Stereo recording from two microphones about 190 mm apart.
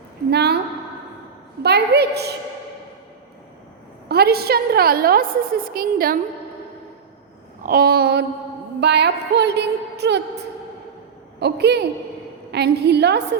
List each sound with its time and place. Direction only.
0.3 s a sound: 60° right (ahead or behind)
1.6 s music: 60° right (ahead or behind)
4.1 s a woman's voice: 55° right (ahead or behind)
7.6 s a woman's voice: 50° right (ahead or behind)
8.8 s music: 60° right (ahead or behind)